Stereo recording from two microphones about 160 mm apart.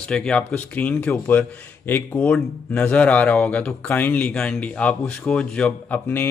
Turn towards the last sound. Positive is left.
turn(degrees=10)  # may be behind; listen again after turning